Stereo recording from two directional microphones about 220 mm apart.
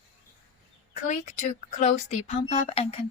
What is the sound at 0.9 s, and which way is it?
Speech, 35° left (ahead or behind).